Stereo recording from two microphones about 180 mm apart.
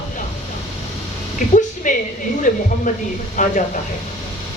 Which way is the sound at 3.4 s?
45° left (ahead or behind).